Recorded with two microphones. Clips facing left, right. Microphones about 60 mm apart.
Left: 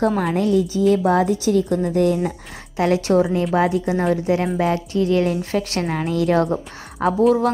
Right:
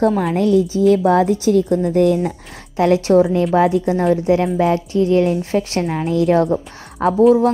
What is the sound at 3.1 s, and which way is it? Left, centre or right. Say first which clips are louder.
Speech: right 4 dB; centre.